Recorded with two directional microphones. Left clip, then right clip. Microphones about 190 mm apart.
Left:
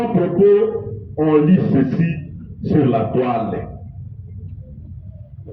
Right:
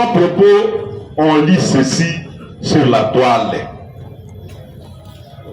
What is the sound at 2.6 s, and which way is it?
Speech, 20° right (ahead or behind).